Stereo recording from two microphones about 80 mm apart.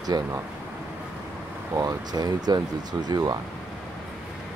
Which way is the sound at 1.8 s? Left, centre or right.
Right.